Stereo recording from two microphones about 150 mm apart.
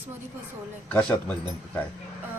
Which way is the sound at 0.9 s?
5° left (ahead or behind).